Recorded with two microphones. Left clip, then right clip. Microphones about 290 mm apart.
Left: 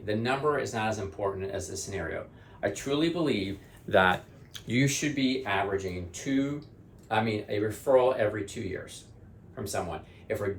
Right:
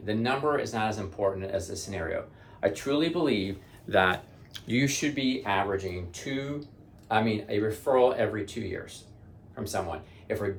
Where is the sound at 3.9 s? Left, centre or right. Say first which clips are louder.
Left 1 dB; centre.